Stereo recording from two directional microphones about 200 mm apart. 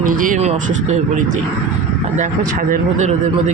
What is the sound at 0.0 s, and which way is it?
Speech, 45° right (ahead or behind).